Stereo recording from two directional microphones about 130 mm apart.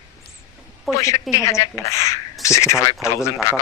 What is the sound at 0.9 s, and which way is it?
Speech, centre (ahead or behind).